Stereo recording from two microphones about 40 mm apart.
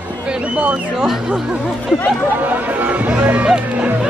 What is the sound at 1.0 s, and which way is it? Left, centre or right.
Music, centre.